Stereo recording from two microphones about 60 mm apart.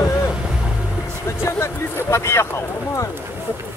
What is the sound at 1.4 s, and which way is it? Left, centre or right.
Music, left.